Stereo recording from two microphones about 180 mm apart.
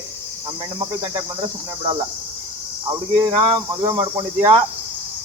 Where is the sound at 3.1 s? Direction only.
20° right (ahead or behind).